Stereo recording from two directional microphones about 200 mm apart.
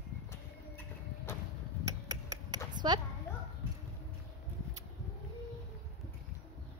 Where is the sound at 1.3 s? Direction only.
10° left (ahead or behind).